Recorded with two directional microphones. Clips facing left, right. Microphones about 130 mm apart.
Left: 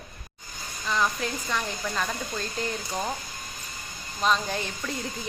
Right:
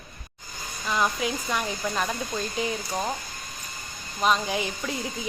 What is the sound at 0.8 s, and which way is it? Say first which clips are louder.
Speech: right 1 dB; 10° right (ahead or behind).